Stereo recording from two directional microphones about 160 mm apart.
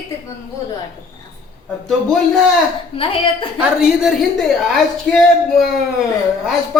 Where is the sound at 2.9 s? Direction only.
35° left (ahead or behind).